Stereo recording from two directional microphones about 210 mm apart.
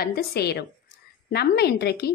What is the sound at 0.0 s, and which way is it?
A woman's voice, 45° left (ahead or behind).